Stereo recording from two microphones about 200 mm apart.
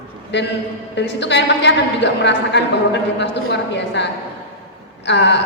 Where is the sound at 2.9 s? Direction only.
60° left (ahead or behind).